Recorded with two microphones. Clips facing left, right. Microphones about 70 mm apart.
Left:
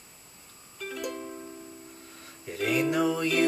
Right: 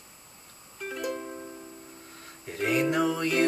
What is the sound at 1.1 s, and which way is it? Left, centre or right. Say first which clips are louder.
Music: right 2 dB; centre.